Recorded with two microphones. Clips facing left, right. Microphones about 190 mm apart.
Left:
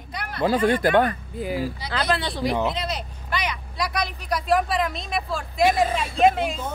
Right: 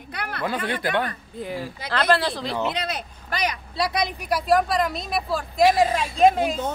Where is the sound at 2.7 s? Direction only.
60° right (ahead or behind).